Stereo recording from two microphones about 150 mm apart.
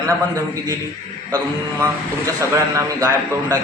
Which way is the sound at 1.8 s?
20° right (ahead or behind).